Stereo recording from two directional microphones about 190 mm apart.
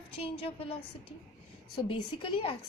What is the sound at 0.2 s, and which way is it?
A woman's voice, 30° left (ahead or behind).